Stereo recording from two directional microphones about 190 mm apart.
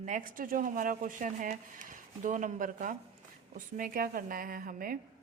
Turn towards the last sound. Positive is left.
turn(degrees=-45)  # may be behind; listen again after turning